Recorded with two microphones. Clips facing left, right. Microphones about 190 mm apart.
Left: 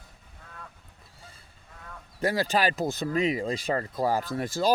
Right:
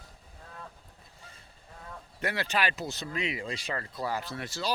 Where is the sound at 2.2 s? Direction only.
35° left (ahead or behind).